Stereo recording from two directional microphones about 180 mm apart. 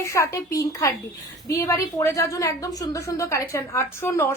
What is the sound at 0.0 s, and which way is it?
A woman's voice, 15° left (ahead or behind).